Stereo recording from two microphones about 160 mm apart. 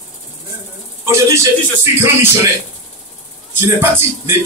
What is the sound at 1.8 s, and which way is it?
Speech, 15° right (ahead or behind).